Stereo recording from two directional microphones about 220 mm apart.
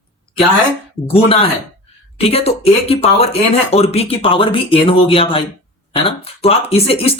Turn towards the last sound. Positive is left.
turn(degrees=25)  # may be behind; listen again after turning